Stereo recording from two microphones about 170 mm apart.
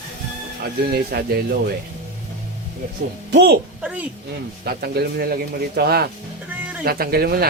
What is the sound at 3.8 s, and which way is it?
Speech, 10° right (ahead or behind).